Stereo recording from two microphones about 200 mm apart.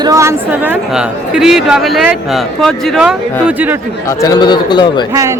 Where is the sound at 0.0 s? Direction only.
15° right (ahead or behind).